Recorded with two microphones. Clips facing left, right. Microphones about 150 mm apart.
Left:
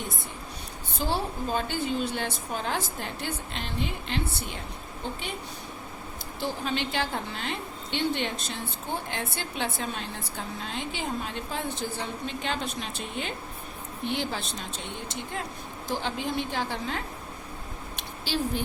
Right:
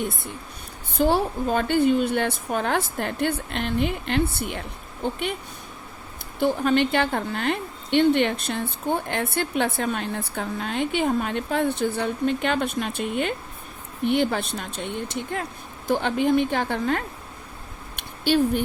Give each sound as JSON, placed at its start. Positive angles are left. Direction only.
{"t": 0.9, "sound": "a woman's voice", "side_deg": -60}
{"t": 6.4, "sound": "a woman's voice", "side_deg": -55}
{"t": 17.9, "sound": "a sound", "side_deg": -60}